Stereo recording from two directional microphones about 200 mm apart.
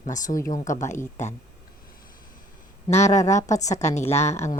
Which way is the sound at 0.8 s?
15° left (ahead or behind).